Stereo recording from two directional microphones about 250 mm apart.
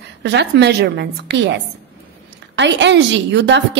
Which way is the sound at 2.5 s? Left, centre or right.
Right.